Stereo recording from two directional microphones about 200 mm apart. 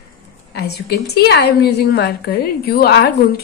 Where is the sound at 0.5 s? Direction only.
55° left (ahead or behind).